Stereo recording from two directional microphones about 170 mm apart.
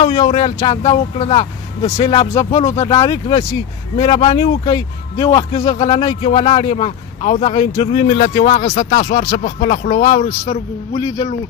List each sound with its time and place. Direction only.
0.0 s a man's voice: 25° left (ahead or behind)
1.1 s a man's voice: 35° left (ahead or behind)
2.3 s speech: 15° left (ahead or behind)
4.4 s a man's voice: 20° left (ahead or behind); by 7.6 s 45° left (ahead or behind)
7.7 s a man's voice: 25° left (ahead or behind)
8.1 s speech: 45° left (ahead or behind)